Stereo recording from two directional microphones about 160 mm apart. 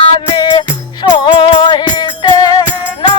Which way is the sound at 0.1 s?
30° left (ahead or behind).